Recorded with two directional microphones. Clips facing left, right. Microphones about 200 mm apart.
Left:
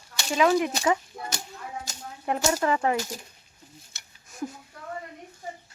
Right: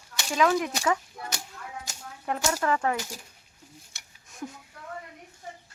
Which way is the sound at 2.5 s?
15° left (ahead or behind).